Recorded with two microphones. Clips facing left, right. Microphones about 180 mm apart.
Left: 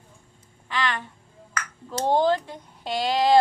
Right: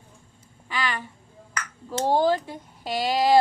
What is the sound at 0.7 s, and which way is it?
Speech, 5° right (ahead or behind).